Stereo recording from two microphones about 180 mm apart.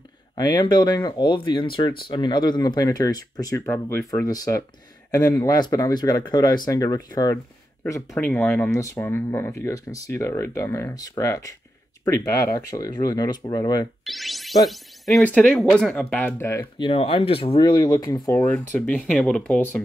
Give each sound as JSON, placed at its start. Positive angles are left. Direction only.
{"t": 0.4, "sound": "speech", "side_deg": 25}
{"t": 14.0, "sound": "music", "side_deg": 0}
{"t": 15.1, "sound": "speech", "side_deg": 10}
{"t": 16.8, "sound": "speech", "side_deg": 30}
{"t": 18.4, "sound": "speech", "side_deg": 10}